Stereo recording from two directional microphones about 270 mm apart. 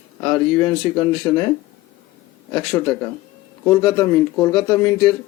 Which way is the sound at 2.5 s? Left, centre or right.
Centre.